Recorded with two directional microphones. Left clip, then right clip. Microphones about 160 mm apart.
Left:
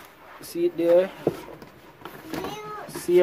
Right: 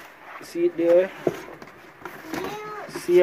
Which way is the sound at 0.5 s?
15° left (ahead or behind).